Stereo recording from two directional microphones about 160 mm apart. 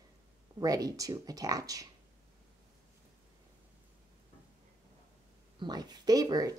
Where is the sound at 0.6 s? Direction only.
20° right (ahead or behind).